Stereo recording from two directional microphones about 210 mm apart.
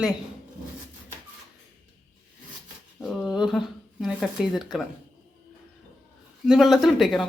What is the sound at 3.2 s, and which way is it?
Speech, centre (ahead or behind).